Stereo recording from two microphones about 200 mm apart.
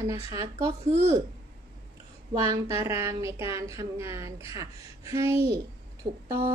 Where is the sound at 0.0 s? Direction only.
15° right (ahead or behind).